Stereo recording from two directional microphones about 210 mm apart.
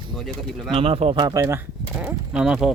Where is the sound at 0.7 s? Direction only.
25° right (ahead or behind).